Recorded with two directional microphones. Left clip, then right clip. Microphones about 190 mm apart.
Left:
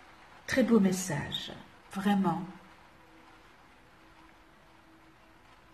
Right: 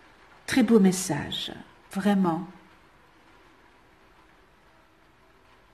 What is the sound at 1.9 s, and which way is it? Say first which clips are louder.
Speech: right 5 dB; 45° right (ahead or behind).